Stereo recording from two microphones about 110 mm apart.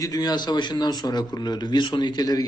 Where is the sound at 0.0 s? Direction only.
35° left (ahead or behind).